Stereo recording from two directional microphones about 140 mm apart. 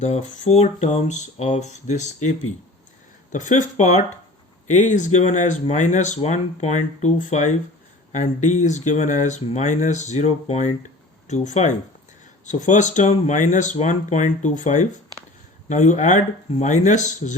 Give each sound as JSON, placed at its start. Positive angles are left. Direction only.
{"t": 0.0, "sound": "speech", "side_deg": 55}
{"t": 3.3, "sound": "speech", "side_deg": 65}